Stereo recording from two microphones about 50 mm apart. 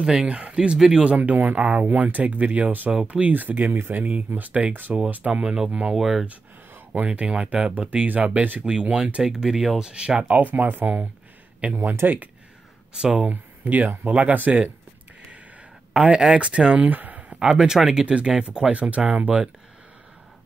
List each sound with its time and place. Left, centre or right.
0.0 s speech: centre
1.1 s speech: right
1.9 s speech: right
5.1 s speech: right
5.9 s speech: centre
7.1 s speech: right
8.6 s speech: centre
10.4 s speech: right
13.0 s speech: centre
13.3 s speech: right
15.9 s speech: centre; by 17.4 s right
17.4 s speech: centre